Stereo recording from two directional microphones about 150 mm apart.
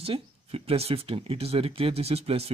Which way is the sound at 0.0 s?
40° right (ahead or behind).